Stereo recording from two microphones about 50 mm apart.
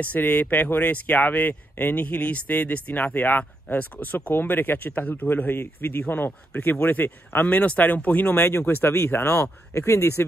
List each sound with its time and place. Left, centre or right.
0.0 s speech: left
8.5 s speech: left